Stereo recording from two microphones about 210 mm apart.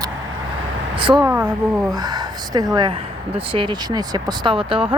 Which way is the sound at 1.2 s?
5° right (ahead or behind).